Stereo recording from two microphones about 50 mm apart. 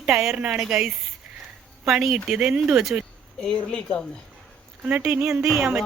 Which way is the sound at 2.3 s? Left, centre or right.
Right.